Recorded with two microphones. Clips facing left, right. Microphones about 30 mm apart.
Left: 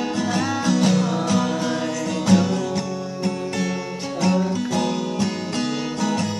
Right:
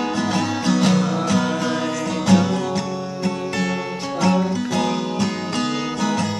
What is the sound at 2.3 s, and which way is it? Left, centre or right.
Music, right.